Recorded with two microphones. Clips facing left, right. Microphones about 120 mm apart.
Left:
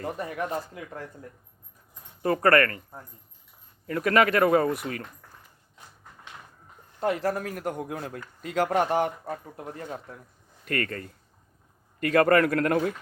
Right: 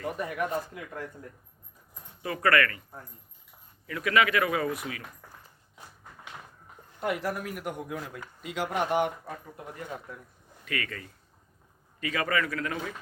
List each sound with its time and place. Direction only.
0.0 s speech: 30° left (ahead or behind)
2.2 s speech: 45° left (ahead or behind)
3.8 s speech: 45° left (ahead or behind)
7.0 s speech: 35° left (ahead or behind)
10.7 s a man's voice: 45° left (ahead or behind)